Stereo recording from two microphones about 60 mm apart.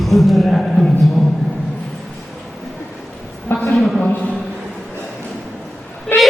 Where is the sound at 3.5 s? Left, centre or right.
Left.